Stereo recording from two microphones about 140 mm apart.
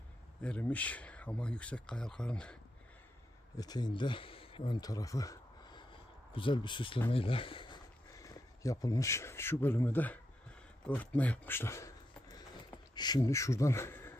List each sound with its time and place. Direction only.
0.4 s speech: 10° left (ahead or behind)
3.5 s speech: 30° left (ahead or behind)
8.2 s speech: 25° left (ahead or behind)